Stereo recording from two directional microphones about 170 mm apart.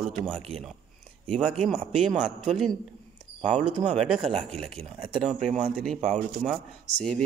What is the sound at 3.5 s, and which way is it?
Speech, 45° right (ahead or behind).